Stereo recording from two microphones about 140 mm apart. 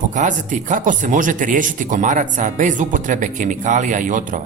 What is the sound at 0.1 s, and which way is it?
Speech, 60° right (ahead or behind).